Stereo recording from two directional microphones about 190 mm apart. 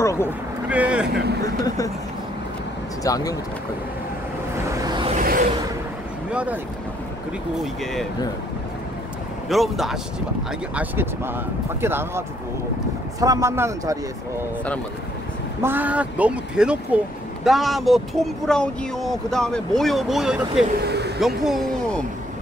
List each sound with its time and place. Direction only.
0.0 s speech: 15° left (ahead or behind)
0.7 s speech: 5° right (ahead or behind)
3.0 s speech: 20° left (ahead or behind)
4.6 s vehicle: 20° right (ahead or behind)
5.1 s a sound: 45° right (ahead or behind)
6.3 s speech: 5° right (ahead or behind)
7.8 s speech: centre (ahead or behind)
9.5 s speech: centre (ahead or behind)
15.6 s speech: 10° right (ahead or behind)
20.8 s vehicle: 60° right (ahead or behind)
21.5 s a sound: centre (ahead or behind)